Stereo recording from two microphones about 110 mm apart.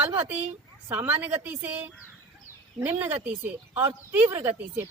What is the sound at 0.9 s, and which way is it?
A woman's voice, 15° right (ahead or behind).